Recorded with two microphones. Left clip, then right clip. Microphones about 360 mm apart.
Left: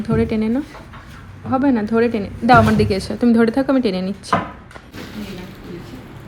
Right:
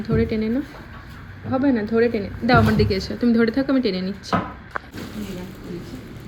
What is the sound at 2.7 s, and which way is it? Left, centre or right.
Speech, centre.